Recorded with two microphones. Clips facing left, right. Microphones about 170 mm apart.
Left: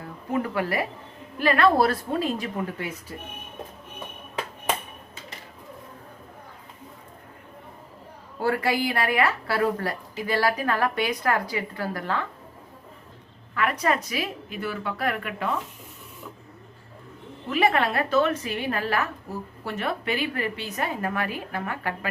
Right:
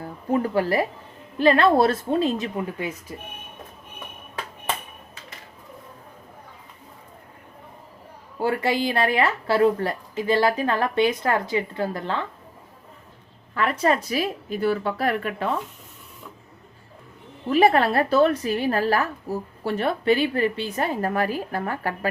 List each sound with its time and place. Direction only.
0.0 s speech: 35° right (ahead or behind)
8.4 s speech: 20° right (ahead or behind)
13.5 s a woman's voice: 30° right (ahead or behind)
17.5 s a woman's voice: 35° right (ahead or behind)